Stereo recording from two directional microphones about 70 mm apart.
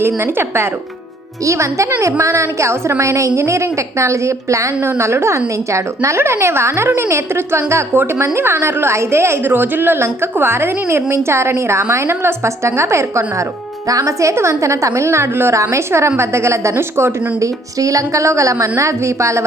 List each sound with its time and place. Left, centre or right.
0.0 s a woman's voice: right
1.5 s a woman's voice: right
13.8 s a woman's voice: right
17.7 s a woman's voice: right